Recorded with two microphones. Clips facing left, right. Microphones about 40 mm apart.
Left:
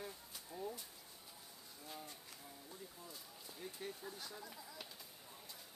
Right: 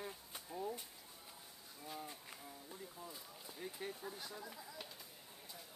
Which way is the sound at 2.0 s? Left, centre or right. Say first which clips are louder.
Right 3 dB; centre.